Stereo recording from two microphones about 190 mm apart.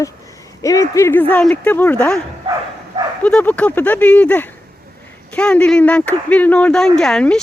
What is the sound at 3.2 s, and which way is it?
Speech, 5° left (ahead or behind).